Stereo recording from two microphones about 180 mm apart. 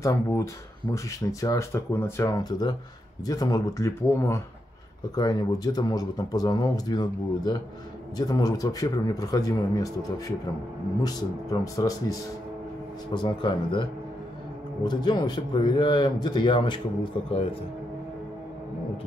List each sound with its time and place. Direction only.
0.0 s speech: 15° left (ahead or behind)
14.9 s speech: 25° left (ahead or behind)